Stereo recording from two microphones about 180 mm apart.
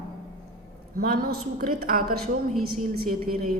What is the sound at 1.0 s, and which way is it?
A woman's voice, 55° right (ahead or behind).